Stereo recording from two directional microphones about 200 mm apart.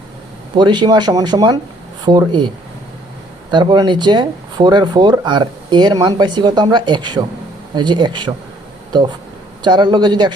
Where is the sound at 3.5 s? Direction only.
25° right (ahead or behind).